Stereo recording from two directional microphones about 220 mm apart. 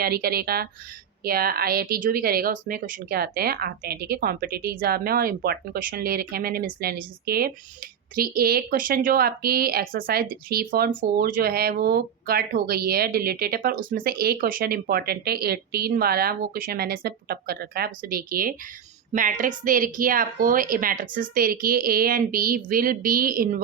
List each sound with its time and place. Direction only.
0.0 s a woman's voice: 45° right (ahead or behind)